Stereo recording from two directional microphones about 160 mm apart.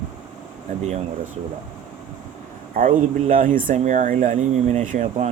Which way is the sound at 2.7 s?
60° right (ahead or behind).